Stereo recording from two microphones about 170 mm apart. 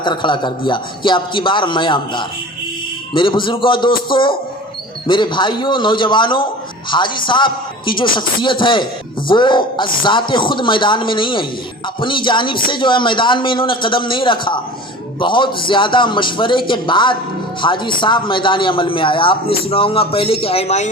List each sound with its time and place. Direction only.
0.0 s a man's voice: 25° left (ahead or behind)